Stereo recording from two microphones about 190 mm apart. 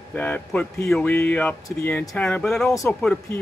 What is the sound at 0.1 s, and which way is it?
Speech, 5° left (ahead or behind).